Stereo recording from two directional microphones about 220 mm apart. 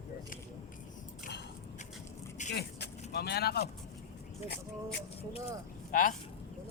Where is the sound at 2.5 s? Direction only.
50° left (ahead or behind).